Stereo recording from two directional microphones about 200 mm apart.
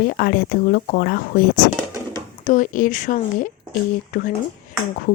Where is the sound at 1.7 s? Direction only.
15° right (ahead or behind).